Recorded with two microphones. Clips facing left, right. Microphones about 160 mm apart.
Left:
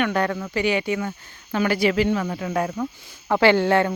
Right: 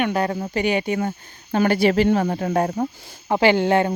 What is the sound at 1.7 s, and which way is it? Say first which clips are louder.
Speech: right 3 dB; 30° right (ahead or behind).